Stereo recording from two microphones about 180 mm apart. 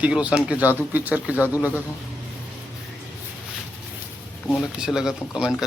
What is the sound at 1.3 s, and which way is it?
Speech, 15° left (ahead or behind).